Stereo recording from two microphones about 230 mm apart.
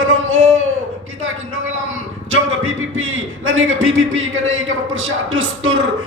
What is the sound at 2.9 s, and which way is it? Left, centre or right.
A man's voice, right.